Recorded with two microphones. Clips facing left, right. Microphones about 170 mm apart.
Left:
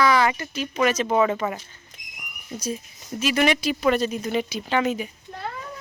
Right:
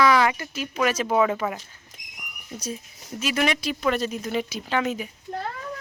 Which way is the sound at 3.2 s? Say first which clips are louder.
Left 3 dB; centre (ahead or behind).